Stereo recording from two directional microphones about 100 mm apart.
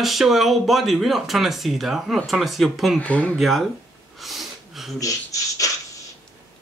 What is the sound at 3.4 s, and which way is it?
Speech, centre (ahead or behind).